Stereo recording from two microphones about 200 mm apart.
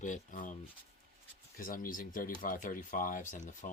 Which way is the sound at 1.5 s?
45° left (ahead or behind).